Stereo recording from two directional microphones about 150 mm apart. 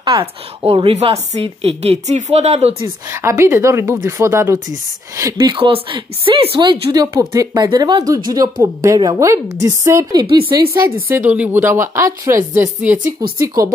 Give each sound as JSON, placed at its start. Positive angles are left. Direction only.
{"t": 0.0, "sound": "a woman's voice", "side_deg": -35}
{"t": 3.1, "sound": "a woman's voice", "side_deg": -20}
{"t": 11.1, "sound": "speech", "side_deg": -10}